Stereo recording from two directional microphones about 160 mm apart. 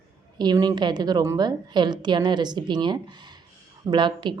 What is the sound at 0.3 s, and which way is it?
A woman's voice, 25° right (ahead or behind).